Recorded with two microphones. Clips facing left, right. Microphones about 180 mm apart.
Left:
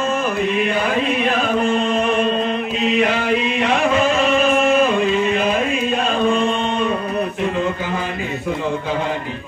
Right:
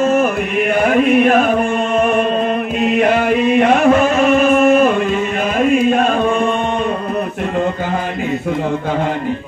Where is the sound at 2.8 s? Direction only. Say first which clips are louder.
Right 4 dB; 50° right (ahead or behind).